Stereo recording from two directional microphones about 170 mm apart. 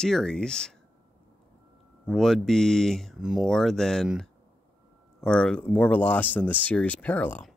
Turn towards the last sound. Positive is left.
turn(degrees=10)  # may be behind; listen again after turning